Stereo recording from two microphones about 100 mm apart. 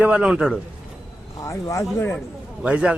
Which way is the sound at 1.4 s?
30° left (ahead or behind).